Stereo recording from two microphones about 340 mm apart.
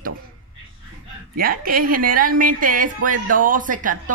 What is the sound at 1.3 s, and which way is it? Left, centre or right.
A woman's voice, right.